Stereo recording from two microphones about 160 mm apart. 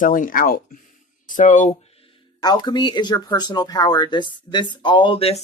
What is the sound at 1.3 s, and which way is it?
Speech, 50° left (ahead or behind).